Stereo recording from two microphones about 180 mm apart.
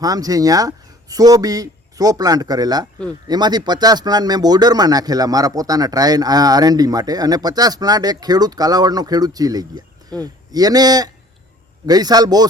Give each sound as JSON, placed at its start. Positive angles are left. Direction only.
{"t": 0.0, "sound": "speech", "side_deg": -20}